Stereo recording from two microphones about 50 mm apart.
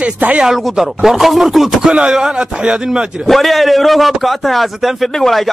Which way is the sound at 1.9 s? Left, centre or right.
Right.